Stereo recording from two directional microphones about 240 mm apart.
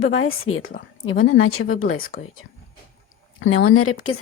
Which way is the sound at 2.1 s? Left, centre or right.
Left.